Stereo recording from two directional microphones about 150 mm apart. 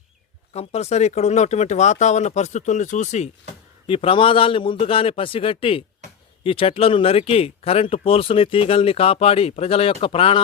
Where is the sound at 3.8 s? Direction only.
40° left (ahead or behind).